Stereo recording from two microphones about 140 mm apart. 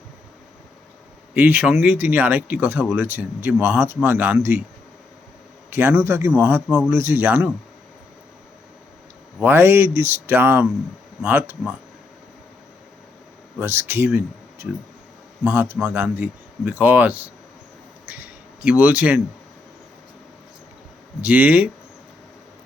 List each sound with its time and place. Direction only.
1.3 s speech: 10° right (ahead or behind)
5.7 s speech: 15° right (ahead or behind)
9.4 s speech: 15° right (ahead or behind)
13.6 s speech: 15° right (ahead or behind)
15.4 s speech: 15° right (ahead or behind)
21.2 s speech: 10° right (ahead or behind)